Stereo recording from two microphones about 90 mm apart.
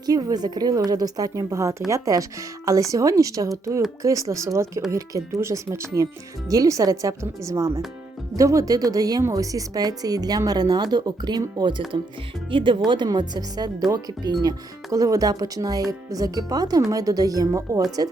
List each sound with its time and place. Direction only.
0.0 s speech: 45° right (ahead or behind)
12.5 s speech: 65° right (ahead or behind)
13.1 s speech: 50° right (ahead or behind)